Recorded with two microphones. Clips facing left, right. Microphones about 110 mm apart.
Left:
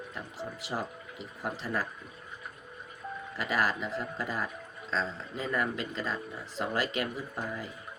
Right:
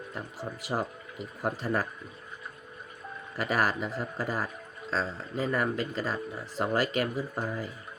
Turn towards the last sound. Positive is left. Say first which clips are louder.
# right 4 dB
turn(degrees=-40)  # may be behind; listen again after turning